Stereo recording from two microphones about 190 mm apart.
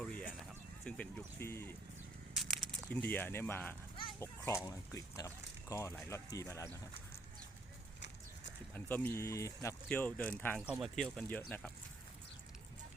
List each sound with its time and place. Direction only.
0.0 s a sound: 5° left (ahead or behind)
0.9 s speech: 10° left (ahead or behind)
2.3 s snake: centre (ahead or behind)
3.1 s speech: 10° left (ahead or behind)
8.7 s speech: 10° left (ahead or behind)